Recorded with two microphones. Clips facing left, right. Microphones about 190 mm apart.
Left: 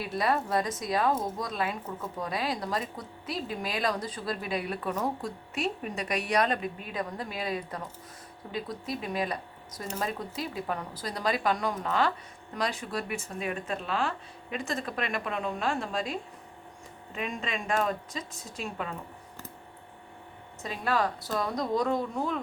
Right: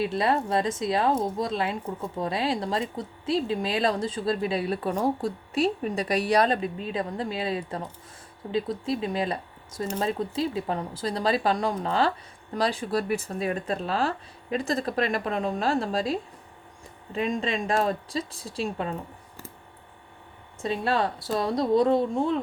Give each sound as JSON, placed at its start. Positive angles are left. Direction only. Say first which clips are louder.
{"t": 0.0, "sound": "speech", "louder": "right 4 dB", "side_deg": -25}
{"t": 20.6, "sound": "speech", "louder": "right 4 dB", "side_deg": -30}